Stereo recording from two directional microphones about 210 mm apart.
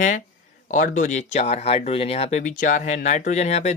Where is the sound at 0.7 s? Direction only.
35° left (ahead or behind).